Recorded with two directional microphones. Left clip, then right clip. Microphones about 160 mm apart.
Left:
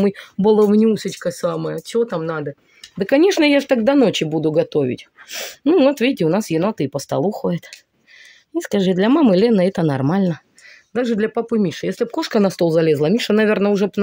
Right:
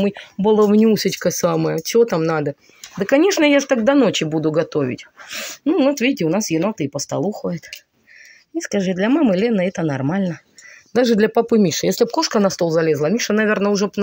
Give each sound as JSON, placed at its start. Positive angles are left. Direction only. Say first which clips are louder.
{"t": 0.0, "sound": "speech", "louder": "left 2 dB", "side_deg": 40}
{"t": 0.9, "sound": "speech", "louder": "right 4 dB", "side_deg": -15}
{"t": 3.0, "sound": "speech", "louder": "even", "side_deg": 25}
{"t": 5.3, "sound": "speech", "louder": "left 3 dB", "side_deg": 50}
{"t": 5.8, "sound": "speech", "louder": "left 1 dB", "side_deg": 30}
{"t": 8.5, "sound": "speech", "louder": "left 2 dB", "side_deg": 40}
{"t": 10.9, "sound": "speech", "louder": "right 4 dB", "side_deg": -10}
{"t": 12.1, "sound": "speech", "louder": "right 1 dB", "side_deg": 30}